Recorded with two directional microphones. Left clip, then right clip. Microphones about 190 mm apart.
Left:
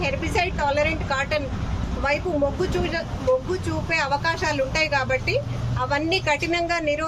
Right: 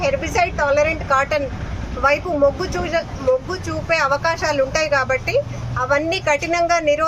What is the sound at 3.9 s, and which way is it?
Speech, 5° left (ahead or behind).